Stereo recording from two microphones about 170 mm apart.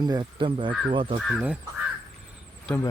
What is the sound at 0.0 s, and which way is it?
Speech, 25° right (ahead or behind).